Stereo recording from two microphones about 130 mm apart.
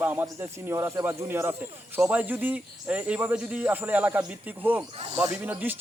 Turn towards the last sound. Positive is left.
turn(degrees=-15)  # may be behind; listen again after turning